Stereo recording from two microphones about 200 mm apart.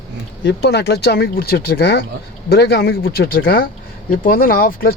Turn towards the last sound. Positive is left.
turn(degrees=45)  # may be behind; listen again after turning